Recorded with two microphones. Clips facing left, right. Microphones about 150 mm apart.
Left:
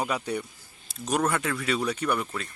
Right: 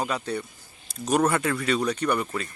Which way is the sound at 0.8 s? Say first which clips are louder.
Right 4 dB; centre (ahead or behind).